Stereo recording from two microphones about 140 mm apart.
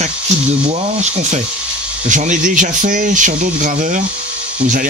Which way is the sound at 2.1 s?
65° right (ahead or behind).